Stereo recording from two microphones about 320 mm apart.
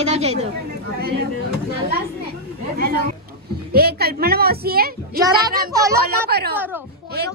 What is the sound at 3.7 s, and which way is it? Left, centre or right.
A woman's voice, right.